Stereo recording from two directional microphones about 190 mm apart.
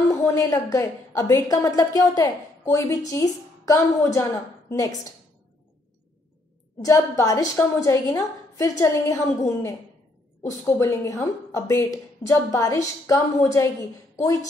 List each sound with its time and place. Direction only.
0.1 s speech: 15° left (ahead or behind)
6.8 s speech: 15° left (ahead or behind)
10.4 s speech: 15° left (ahead or behind)